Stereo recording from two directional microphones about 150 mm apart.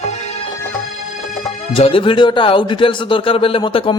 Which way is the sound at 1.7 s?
40° left (ahead or behind).